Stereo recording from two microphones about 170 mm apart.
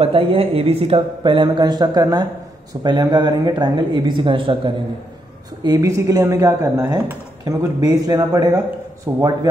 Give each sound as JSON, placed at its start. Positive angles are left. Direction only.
{"t": 0.0, "sound": "speech", "side_deg": -35}